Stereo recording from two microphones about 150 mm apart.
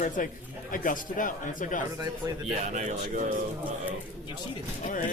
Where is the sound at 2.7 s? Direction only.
55° right (ahead or behind).